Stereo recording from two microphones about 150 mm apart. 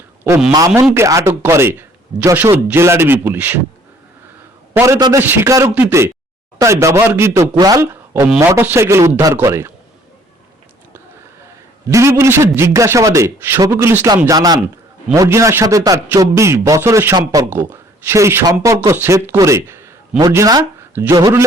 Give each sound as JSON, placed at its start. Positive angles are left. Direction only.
{"t": 0.8, "sound": "a man's voice", "side_deg": -20}
{"t": 4.7, "sound": "a man's voice", "side_deg": -20}
{"t": 11.9, "sound": "a man's voice", "side_deg": -20}